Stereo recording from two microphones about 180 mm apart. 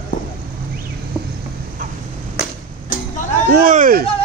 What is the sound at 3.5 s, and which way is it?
Speech, 50° right (ahead or behind).